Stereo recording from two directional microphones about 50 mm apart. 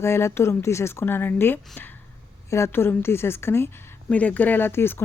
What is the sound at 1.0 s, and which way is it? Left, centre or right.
Speech, left.